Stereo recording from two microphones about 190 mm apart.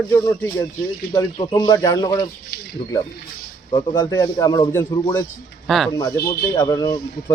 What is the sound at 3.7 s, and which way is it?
Speech, 20° left (ahead or behind).